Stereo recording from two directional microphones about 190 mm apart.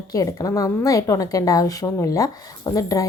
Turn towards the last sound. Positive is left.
turn(degrees=20)  # may be behind; listen again after turning